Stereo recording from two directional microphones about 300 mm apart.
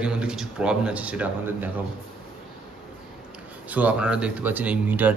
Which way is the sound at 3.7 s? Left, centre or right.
Centre.